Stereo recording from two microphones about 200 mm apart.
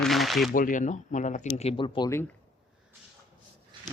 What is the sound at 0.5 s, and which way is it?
Speech, 40° left (ahead or behind).